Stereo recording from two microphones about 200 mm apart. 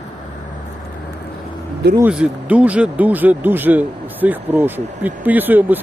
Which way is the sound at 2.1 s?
5° right (ahead or behind).